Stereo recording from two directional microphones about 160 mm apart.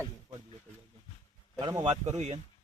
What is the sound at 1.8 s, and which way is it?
Speech, 45° right (ahead or behind).